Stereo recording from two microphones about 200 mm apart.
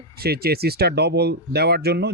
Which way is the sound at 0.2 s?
50° right (ahead or behind).